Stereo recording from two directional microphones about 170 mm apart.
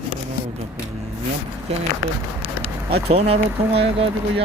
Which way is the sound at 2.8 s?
35° right (ahead or behind).